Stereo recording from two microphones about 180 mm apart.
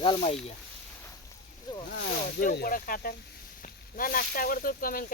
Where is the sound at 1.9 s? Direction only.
60° left (ahead or behind).